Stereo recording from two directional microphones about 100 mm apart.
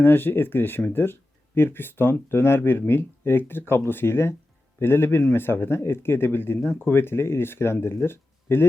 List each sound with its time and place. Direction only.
0.0 s speech: 20° left (ahead or behind)